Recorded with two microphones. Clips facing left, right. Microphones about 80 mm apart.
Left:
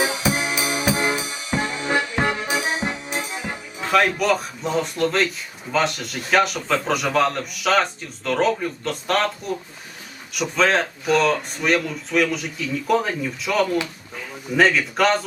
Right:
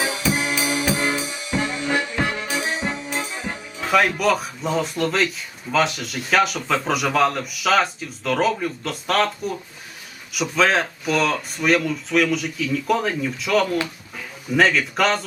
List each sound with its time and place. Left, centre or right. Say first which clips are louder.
0.0 s music: left 1 dB; centre
3.8 s a man's voice: even; centre